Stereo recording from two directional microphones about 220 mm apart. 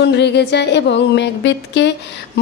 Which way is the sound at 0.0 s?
50° left (ahead or behind).